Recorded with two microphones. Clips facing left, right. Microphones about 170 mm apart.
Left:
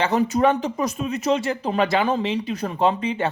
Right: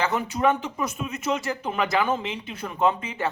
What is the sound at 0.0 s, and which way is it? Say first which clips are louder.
A man's voice: left 4 dB; 35° left (ahead or behind).